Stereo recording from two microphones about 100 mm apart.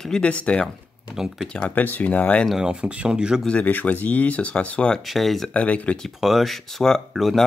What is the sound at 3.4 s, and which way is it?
Speech, 15° left (ahead or behind).